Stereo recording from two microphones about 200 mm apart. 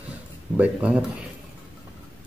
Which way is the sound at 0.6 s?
5° right (ahead or behind).